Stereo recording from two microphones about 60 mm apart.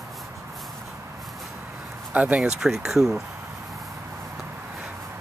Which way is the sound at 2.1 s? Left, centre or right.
Right.